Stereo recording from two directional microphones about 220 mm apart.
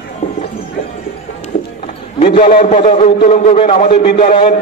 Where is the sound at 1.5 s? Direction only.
40° left (ahead or behind).